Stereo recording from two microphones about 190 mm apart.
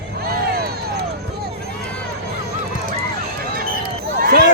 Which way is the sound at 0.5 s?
55° right (ahead or behind).